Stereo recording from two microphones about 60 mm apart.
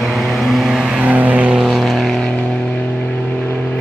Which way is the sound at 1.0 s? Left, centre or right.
Right.